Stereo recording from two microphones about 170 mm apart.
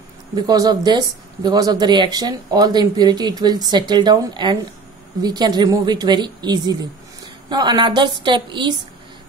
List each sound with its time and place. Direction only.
0.4 s speech: 25° right (ahead or behind)